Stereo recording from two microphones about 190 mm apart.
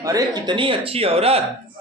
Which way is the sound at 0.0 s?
20° right (ahead or behind).